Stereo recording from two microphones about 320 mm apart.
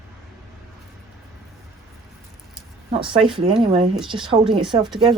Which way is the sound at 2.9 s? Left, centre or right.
Centre.